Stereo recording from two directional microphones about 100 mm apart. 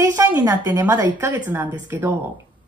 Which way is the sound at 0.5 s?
35° right (ahead or behind).